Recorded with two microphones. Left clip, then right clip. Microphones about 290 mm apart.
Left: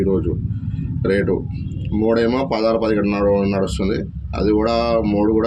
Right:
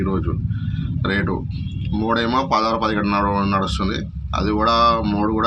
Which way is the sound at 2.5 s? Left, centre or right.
Right.